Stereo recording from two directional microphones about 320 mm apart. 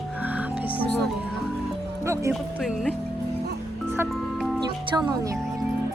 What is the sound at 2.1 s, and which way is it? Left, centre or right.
Music, centre.